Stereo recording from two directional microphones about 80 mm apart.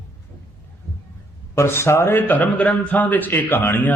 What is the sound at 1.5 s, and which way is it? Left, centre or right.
A man's voice, left.